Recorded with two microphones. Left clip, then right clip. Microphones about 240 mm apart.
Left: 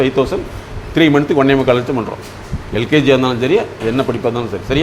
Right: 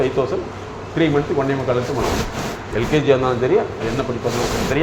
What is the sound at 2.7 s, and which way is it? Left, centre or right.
A man's voice, left.